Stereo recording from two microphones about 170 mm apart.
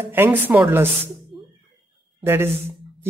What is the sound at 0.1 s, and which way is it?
Speech, 10° right (ahead or behind).